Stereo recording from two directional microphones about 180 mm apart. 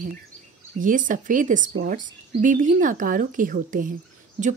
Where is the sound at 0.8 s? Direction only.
45° right (ahead or behind).